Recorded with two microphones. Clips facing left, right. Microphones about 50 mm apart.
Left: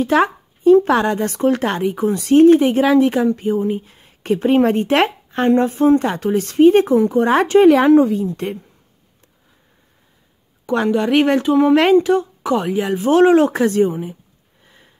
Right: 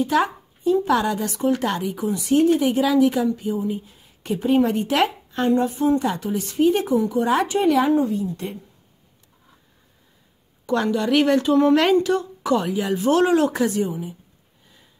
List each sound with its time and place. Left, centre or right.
0.1 s a woman's voice: left
7.4 s speech: left
8.3 s a woman's voice: left
10.7 s speech: left
13.7 s a woman's voice: left